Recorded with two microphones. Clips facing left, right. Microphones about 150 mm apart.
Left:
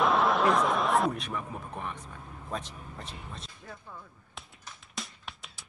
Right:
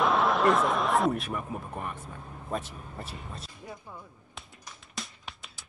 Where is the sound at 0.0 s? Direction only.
Centre (ahead or behind).